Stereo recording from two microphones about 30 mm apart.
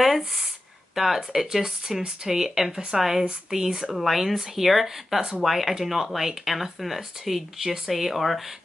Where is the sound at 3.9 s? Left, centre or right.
Centre.